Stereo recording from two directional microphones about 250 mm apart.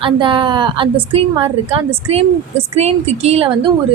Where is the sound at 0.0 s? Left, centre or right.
Centre.